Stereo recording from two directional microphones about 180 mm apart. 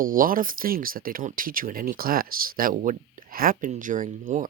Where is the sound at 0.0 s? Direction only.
50° right (ahead or behind).